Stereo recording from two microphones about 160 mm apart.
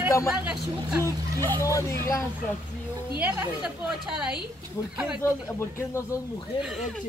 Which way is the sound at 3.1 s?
10° right (ahead or behind).